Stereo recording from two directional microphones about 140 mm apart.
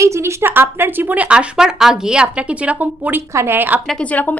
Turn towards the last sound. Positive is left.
turn(degrees=10)  # may be behind; listen again after turning